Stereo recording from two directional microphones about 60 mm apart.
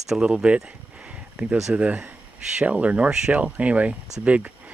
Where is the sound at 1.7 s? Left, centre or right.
Right.